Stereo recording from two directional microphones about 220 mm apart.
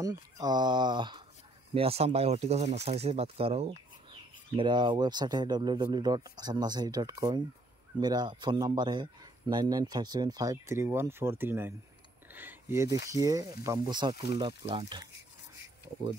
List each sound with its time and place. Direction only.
0.0 s speech: 15° right (ahead or behind)